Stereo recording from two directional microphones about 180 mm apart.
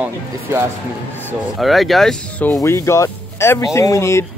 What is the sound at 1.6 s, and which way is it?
Speech, centre (ahead or behind).